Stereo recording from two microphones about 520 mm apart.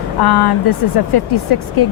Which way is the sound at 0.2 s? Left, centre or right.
Left.